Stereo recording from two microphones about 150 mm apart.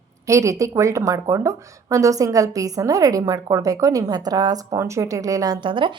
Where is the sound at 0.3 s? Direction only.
20° right (ahead or behind).